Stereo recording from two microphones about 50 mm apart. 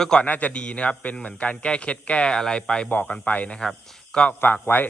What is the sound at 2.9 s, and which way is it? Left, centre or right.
Speech, left.